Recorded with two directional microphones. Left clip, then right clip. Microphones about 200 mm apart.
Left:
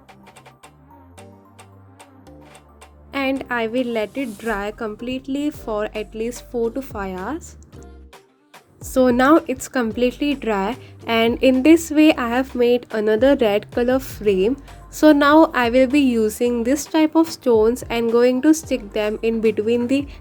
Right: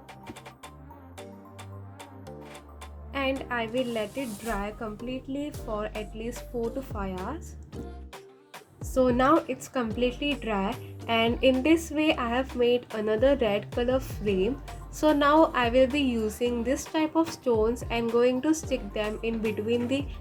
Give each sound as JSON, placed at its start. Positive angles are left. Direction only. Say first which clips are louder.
{"t": 3.1, "sound": "a woman's voice", "louder": "left 7 dB", "side_deg": 50}
{"t": 8.8, "sound": "a woman's voice", "louder": "left 7 dB", "side_deg": 45}